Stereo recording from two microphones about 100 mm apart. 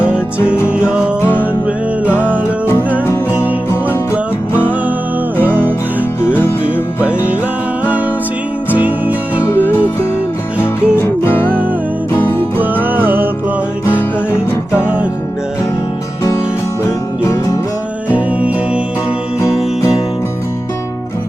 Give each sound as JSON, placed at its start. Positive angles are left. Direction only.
{"t": 0.7, "sound": "music", "side_deg": -10}
{"t": 5.4, "sound": "music", "side_deg": -20}
{"t": 6.2, "sound": "music", "side_deg": 20}
{"t": 8.7, "sound": "music", "side_deg": -15}
{"t": 9.4, "sound": "music", "side_deg": 20}
{"t": 12.5, "sound": "music", "side_deg": -15}
{"t": 16.8, "sound": "music", "side_deg": 30}
{"t": 18.1, "sound": "music", "side_deg": -15}